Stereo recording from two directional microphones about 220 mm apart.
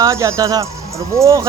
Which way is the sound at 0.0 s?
15° right (ahead or behind).